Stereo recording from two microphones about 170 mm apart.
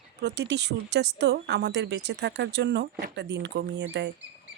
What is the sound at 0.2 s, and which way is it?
Speech, 80° right.